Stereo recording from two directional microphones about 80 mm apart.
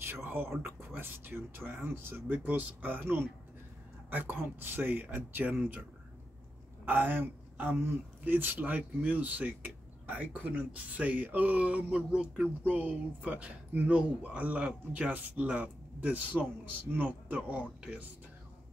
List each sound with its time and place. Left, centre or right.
0.0 s speech: right
6.9 s speech: right